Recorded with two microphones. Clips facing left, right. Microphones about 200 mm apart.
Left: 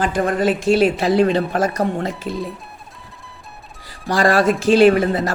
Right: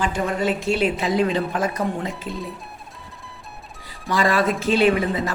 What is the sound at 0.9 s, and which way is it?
Speech, 70° left (ahead or behind).